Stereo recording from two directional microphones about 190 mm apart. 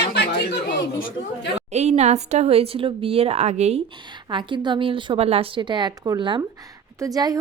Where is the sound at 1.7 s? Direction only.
35° right (ahead or behind).